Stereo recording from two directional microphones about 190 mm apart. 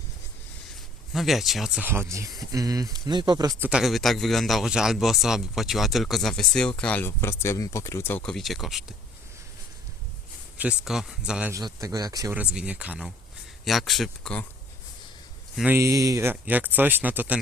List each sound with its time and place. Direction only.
1.1 s a man's voice: centre (ahead or behind); by 3.7 s 20° right (ahead or behind)
3.7 s a man's voice: centre (ahead or behind)
10.6 s a man's voice: 5° right (ahead or behind)
11.5 s speech: 20° right (ahead or behind)
12.4 s a man's voice: 5° right (ahead or behind)
15.5 s speech: 10° right (ahead or behind)